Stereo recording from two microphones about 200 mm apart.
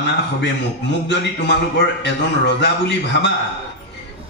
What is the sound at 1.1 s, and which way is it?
A man's voice, 60° left (ahead or behind).